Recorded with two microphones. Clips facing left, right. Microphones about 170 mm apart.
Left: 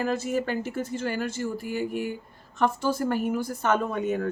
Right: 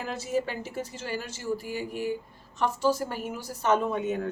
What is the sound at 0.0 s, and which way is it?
Speech, 55° left (ahead or behind).